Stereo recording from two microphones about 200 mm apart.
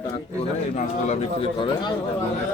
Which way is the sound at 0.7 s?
35° left (ahead or behind).